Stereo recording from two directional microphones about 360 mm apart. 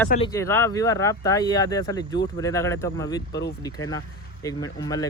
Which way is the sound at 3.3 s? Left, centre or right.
Left.